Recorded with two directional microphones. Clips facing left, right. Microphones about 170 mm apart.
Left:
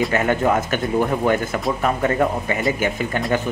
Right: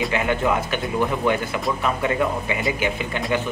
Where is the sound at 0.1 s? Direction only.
45° left (ahead or behind).